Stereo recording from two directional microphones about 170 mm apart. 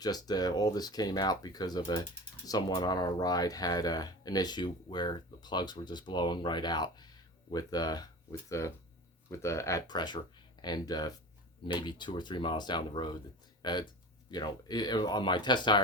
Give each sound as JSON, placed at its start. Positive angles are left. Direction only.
{"t": 0.0, "sound": "speech", "side_deg": 25}